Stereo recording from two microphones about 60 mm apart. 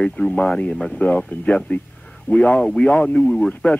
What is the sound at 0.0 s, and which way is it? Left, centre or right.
Speech, centre.